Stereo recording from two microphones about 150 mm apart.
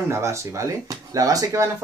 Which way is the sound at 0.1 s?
20° right (ahead or behind).